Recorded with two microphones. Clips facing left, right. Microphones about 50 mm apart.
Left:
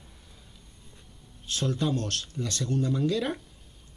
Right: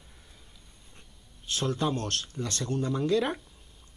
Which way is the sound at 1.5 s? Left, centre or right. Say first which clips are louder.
Left 1 dB; right.